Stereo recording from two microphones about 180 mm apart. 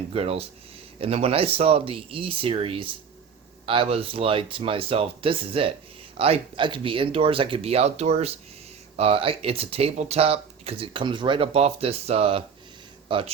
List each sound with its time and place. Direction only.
0.1 s a man's voice: 35° right (ahead or behind)